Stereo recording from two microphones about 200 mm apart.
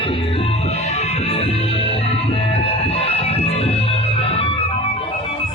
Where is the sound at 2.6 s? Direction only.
30° left (ahead or behind).